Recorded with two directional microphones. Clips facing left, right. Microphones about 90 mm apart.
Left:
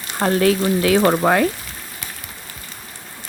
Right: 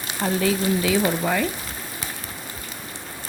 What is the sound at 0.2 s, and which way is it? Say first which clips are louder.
Speech: left 6 dB; 65° left (ahead or behind).